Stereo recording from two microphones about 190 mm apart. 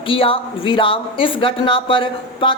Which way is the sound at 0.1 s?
30° left (ahead or behind).